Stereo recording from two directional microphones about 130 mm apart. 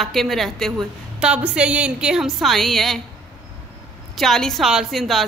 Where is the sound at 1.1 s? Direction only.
10° right (ahead or behind).